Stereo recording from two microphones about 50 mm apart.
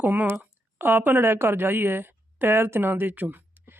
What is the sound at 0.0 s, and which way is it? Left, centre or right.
A woman's voice, right.